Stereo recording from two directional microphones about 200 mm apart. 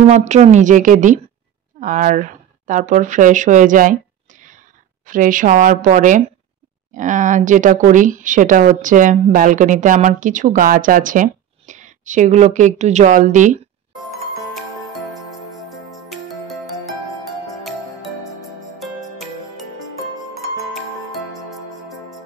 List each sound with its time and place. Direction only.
0.0 s speech: 35° right (ahead or behind)
15.9 s music: centre (ahead or behind)
20.7 s music: centre (ahead or behind)